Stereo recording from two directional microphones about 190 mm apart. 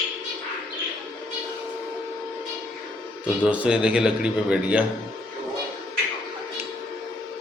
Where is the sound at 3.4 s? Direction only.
5° right (ahead or behind).